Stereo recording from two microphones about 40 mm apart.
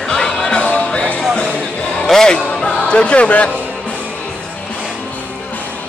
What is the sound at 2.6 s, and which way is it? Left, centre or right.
Speech, left.